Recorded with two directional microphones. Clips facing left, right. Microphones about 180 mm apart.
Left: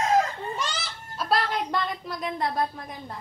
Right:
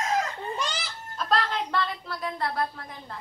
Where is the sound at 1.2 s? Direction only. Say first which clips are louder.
Left 1 dB; 10° left (ahead or behind).